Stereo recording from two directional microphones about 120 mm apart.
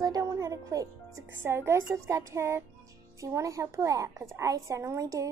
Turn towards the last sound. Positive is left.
turn(degrees=-30)  # may be behind; listen again after turning